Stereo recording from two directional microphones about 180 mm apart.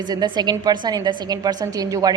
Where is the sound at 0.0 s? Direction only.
25° right (ahead or behind).